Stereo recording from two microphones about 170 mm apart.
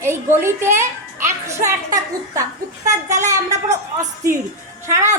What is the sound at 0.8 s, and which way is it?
A child's voice, 15° right (ahead or behind).